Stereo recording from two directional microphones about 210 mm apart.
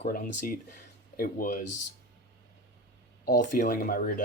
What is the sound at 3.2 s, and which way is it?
Speech, 40° left (ahead or behind).